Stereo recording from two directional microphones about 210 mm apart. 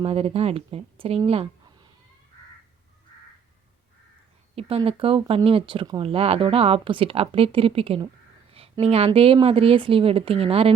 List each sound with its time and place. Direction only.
0.0 s speech: 30° right (ahead or behind)
4.5 s speech: 25° right (ahead or behind)